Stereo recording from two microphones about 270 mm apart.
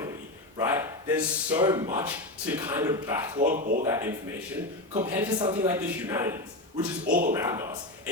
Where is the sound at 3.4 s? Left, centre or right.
Right.